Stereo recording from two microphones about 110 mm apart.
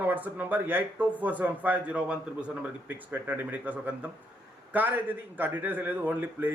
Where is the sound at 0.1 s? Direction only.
15° right (ahead or behind).